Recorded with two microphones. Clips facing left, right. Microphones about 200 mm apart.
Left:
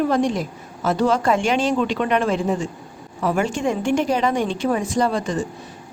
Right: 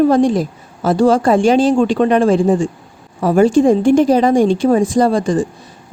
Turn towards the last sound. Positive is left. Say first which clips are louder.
# right 7 dB
turn(degrees=-30)  # may be behind; listen again after turning